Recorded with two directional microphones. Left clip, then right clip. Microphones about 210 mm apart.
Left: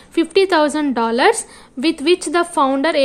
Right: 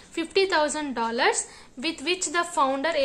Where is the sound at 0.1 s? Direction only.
35° left (ahead or behind).